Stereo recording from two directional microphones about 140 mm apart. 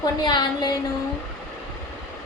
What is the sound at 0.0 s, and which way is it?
Speech, 30° left (ahead or behind).